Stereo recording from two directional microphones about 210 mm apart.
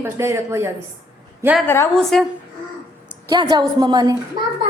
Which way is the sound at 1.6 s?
10° left (ahead or behind).